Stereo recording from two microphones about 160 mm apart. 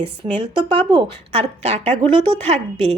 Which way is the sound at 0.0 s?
35° right (ahead or behind).